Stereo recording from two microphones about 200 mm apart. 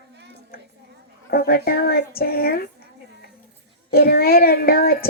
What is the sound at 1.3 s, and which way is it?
Speech, 50° left (ahead or behind).